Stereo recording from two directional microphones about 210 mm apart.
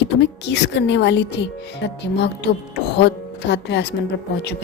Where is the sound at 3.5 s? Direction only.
55° left (ahead or behind).